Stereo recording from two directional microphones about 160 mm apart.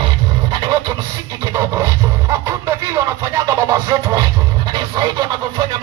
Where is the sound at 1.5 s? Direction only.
20° right (ahead or behind).